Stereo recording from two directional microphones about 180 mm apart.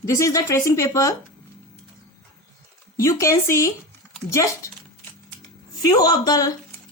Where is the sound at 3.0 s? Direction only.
15° left (ahead or behind).